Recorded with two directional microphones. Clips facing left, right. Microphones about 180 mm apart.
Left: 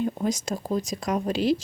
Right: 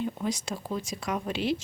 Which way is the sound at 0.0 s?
45° left (ahead or behind).